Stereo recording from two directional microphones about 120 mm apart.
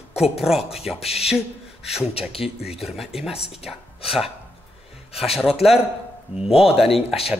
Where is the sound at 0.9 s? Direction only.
60° left (ahead or behind).